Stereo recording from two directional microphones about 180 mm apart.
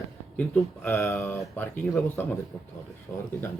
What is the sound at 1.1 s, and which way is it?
Speech, centre (ahead or behind).